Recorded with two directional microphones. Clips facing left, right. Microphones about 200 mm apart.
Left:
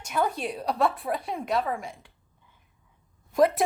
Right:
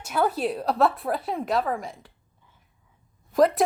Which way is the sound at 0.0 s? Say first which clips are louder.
Right 3 dB; 5° right (ahead or behind).